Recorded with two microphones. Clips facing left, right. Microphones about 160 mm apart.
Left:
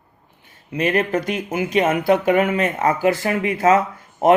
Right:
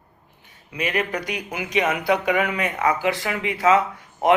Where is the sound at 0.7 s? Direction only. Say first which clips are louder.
Left 6 dB; 50° left (ahead or behind).